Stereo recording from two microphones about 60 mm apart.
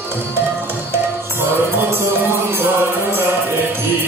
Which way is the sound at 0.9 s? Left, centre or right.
Right.